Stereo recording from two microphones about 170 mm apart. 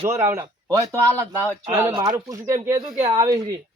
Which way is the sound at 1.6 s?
15° right (ahead or behind).